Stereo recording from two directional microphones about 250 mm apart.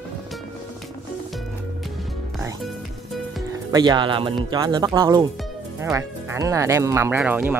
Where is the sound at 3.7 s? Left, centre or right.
Centre.